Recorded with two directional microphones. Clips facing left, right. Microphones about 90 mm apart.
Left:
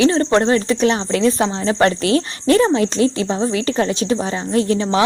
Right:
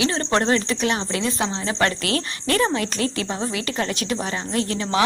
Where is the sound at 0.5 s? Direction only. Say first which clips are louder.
Left 6 dB; 35° left (ahead or behind).